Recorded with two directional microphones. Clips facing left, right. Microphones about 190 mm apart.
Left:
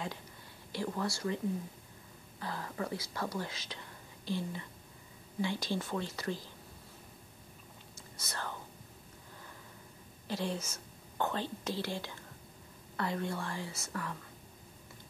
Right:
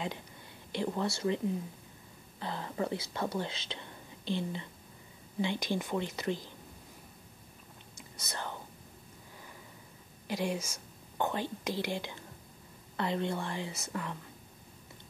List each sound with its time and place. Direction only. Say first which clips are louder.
0.7 s speech: right 3 dB; 20° right (ahead or behind)
2.4 s speech: right 3 dB; 25° right (ahead or behind)
8.2 s speech: right 1 dB; 20° right (ahead or behind)
10.2 s speech: right 3 dB; 15° right (ahead or behind)